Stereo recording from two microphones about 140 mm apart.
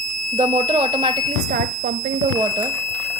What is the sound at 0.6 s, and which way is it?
Speech, 35° right (ahead or behind).